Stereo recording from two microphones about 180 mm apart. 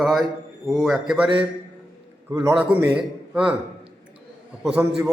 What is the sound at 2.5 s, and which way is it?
A man's voice, 10° right (ahead or behind).